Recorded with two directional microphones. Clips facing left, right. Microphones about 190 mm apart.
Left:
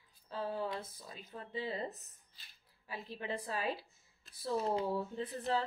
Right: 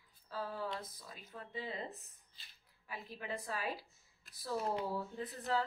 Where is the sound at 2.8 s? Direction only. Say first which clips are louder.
Left 3 dB; 30° left (ahead or behind).